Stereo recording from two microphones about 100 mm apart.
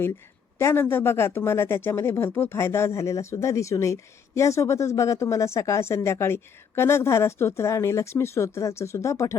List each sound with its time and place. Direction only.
0.6 s speech: 25° left (ahead or behind)